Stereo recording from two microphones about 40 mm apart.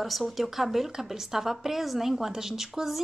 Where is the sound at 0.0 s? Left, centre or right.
Centre.